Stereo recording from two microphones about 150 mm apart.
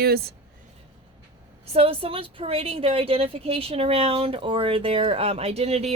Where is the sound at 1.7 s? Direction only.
40° right (ahead or behind).